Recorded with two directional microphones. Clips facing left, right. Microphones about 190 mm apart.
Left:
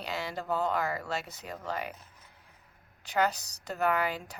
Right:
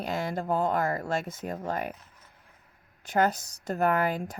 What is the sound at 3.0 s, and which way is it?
A woman's voice, 50° right (ahead or behind).